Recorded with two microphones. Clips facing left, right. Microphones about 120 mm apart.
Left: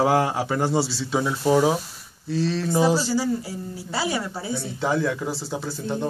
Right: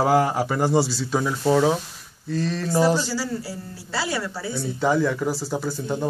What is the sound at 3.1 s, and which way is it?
Speech, 20° left (ahead or behind).